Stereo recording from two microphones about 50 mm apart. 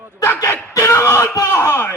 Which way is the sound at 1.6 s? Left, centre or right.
Left.